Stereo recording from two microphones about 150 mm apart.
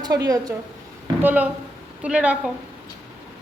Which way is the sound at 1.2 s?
10° right (ahead or behind).